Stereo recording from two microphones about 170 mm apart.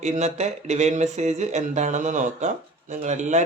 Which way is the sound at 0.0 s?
40° right (ahead or behind).